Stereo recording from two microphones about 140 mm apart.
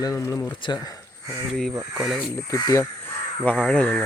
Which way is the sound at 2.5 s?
20° left (ahead or behind).